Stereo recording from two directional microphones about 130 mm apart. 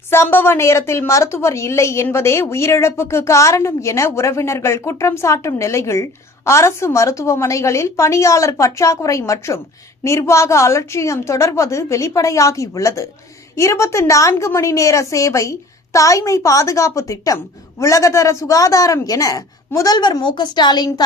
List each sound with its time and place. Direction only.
0.1 s a woman's voice: 20° left (ahead or behind)